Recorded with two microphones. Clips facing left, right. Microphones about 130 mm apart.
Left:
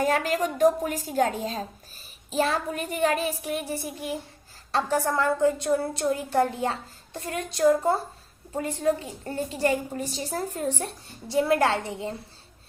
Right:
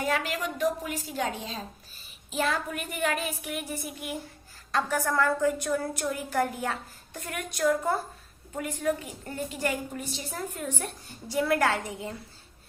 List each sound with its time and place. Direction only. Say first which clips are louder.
0.0 s a woman's voice: left 5 dB; 40° left (ahead or behind)
2.3 s a woman's voice: left 4 dB; 30° left (ahead or behind)